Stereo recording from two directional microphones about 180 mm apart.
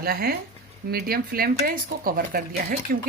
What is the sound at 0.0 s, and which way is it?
Speech, 55° right (ahead or behind).